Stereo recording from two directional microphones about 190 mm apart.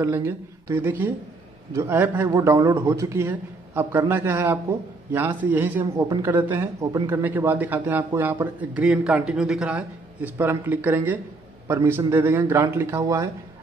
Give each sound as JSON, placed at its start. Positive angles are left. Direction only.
{"t": 0.0, "sound": "a man's voice", "side_deg": -15}